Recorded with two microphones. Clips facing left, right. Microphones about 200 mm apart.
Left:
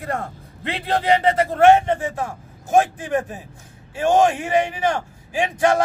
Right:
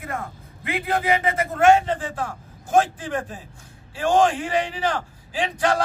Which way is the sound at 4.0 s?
20° left (ahead or behind).